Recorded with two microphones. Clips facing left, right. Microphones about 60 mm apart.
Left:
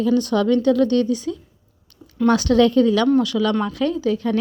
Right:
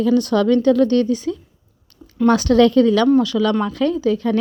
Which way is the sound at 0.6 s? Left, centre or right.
Right.